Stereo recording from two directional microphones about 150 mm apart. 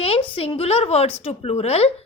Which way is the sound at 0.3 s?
40° left (ahead or behind).